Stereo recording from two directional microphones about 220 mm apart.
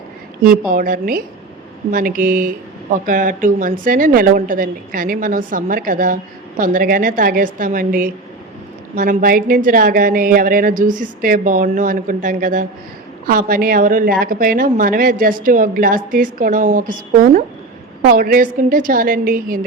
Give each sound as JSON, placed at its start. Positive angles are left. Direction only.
{"t": 0.7, "sound": "a woman's voice", "side_deg": -40}